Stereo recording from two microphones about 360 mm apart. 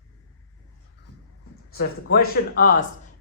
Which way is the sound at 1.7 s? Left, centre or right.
Left.